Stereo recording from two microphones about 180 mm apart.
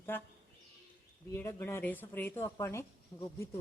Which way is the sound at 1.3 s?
15° left (ahead or behind).